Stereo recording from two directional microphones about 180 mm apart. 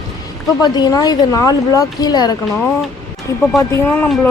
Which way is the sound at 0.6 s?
20° left (ahead or behind).